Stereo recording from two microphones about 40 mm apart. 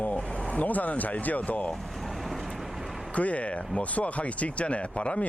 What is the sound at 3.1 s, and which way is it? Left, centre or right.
Speech, left.